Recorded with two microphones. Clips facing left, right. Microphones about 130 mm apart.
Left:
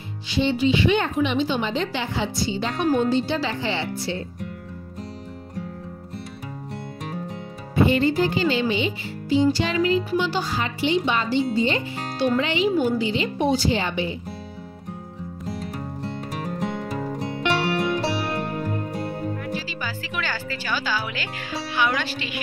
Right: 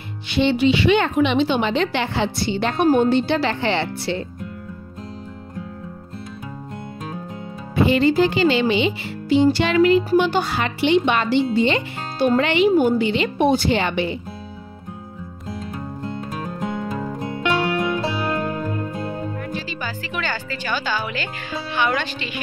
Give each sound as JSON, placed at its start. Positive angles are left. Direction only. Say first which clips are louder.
{"t": 0.3, "sound": "speech", "louder": "right 3 dB", "side_deg": -70}
{"t": 7.7, "sound": "speech", "louder": "right 3 dB", "side_deg": -90}
{"t": 12.2, "sound": "speech", "louder": "right 5 dB", "side_deg": -60}
{"t": 19.5, "sound": "speech", "louder": "right 1 dB", "side_deg": 5}
{"t": 21.7, "sound": "music", "louder": "right 2 dB", "side_deg": 5}